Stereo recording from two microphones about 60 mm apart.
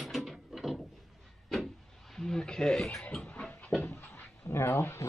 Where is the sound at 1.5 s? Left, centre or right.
Centre.